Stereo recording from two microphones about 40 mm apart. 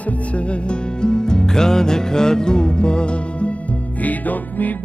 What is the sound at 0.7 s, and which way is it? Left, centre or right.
Music, left.